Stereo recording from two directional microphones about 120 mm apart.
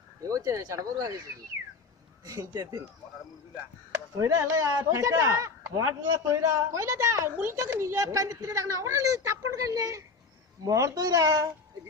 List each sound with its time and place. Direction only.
0.2 s speech: 30° right (ahead or behind)
2.2 s a child's voice: 35° right (ahead or behind)
3.9 s a child's voice: 25° right (ahead or behind)